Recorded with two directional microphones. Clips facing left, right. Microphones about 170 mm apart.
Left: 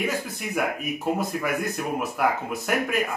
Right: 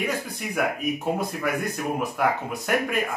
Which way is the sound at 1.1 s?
Centre (ahead or behind).